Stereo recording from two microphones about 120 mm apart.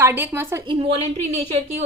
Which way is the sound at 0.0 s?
20° right (ahead or behind).